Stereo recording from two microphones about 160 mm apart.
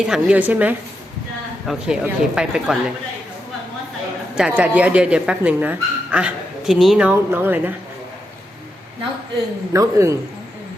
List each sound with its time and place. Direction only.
0.0 s speech: 5° right (ahead or behind)
4.4 s speech: 5° right (ahead or behind)
9.7 s speech: 20° right (ahead or behind)